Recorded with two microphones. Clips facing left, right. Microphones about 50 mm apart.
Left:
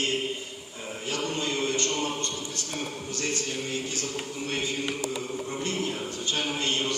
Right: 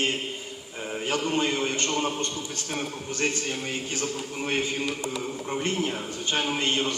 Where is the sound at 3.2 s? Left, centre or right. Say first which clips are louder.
Right 3 dB; right.